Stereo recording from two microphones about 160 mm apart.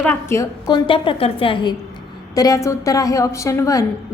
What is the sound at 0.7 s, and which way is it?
A woman's voice, 30° left (ahead or behind).